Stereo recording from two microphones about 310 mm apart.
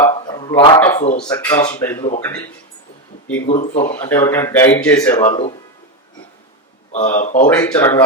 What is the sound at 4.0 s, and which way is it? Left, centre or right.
Speech, centre.